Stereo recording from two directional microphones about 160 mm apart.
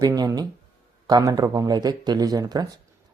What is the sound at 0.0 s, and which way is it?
Speech, 20° right (ahead or behind).